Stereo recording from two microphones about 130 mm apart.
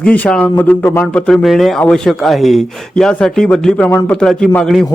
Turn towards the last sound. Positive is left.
turn(degrees=0)  # may be behind; listen again after turning